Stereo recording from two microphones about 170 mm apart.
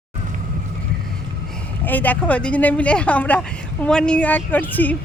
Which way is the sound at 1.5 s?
10° left (ahead or behind).